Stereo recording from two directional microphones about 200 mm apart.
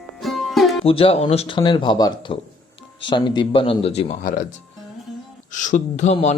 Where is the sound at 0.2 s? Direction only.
Centre (ahead or behind).